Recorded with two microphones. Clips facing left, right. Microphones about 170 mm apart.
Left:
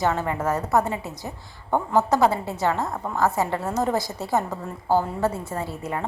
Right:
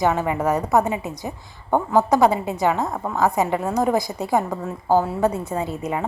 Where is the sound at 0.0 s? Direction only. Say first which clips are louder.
Right 3 dB; 15° right (ahead or behind).